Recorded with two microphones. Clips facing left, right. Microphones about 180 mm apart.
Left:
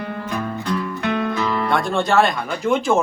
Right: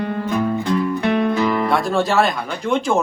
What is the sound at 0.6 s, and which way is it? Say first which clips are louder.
Music: right 4 dB; 20° right (ahead or behind).